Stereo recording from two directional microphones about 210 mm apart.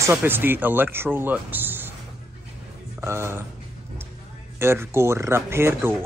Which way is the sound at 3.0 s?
10° right (ahead or behind).